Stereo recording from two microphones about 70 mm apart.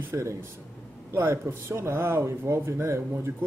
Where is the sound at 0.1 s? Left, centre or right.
Right.